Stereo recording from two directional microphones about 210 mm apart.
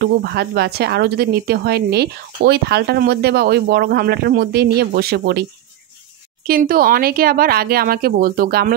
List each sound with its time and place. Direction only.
0.0 s speech: 50° right (ahead or behind)